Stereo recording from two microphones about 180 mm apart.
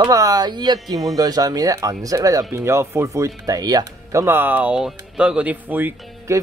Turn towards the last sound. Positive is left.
turn(degrees=-15)  # may be behind; listen again after turning